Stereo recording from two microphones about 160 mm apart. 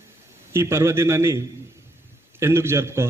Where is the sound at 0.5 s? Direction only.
15° right (ahead or behind).